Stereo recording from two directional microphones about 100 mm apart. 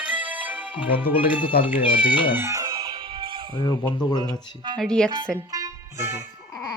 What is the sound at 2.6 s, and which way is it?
Music, 50° right (ahead or behind).